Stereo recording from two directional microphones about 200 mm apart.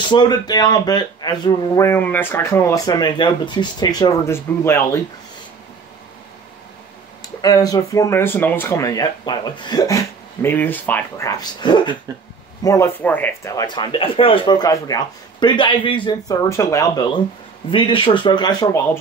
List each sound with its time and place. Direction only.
0.1 s speech: 20° left (ahead or behind)
7.4 s speech: 20° left (ahead or behind)